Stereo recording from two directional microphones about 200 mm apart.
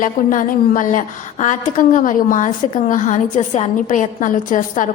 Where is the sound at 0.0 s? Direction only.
40° left (ahead or behind).